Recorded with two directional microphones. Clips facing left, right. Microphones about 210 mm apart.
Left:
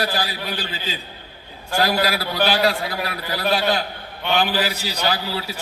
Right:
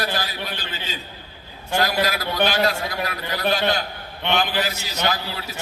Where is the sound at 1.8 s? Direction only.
45° right (ahead or behind).